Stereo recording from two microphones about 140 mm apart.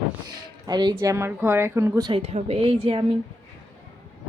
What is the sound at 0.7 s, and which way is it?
Speech, 30° right (ahead or behind).